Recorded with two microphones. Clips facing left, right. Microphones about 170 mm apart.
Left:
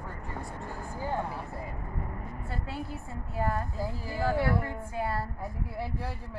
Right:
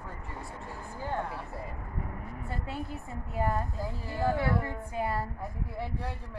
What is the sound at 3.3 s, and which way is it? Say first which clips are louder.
Speech: right 1 dB; 20° right (ahead or behind).